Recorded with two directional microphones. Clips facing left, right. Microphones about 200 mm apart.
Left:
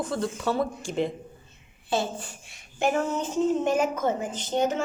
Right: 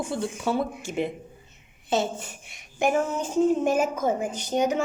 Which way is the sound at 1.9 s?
20° right (ahead or behind).